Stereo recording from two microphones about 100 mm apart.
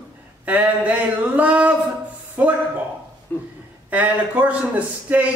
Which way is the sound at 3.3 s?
20° left (ahead or behind).